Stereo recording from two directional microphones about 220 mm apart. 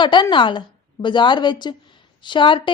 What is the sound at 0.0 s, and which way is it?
A woman's voice, 20° left (ahead or behind).